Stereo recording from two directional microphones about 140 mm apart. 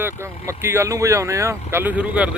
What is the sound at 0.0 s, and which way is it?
Speech, 20° right (ahead or behind).